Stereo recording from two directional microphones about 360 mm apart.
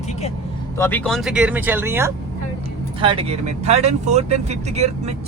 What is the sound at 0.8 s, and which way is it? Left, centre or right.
Speech, centre.